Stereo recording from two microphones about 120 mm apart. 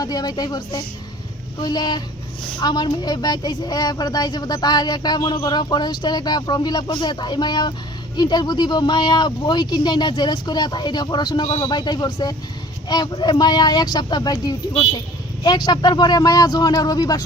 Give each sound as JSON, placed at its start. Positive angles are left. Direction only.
{"t": 0.0, "sound": "a woman's voice", "side_deg": 35}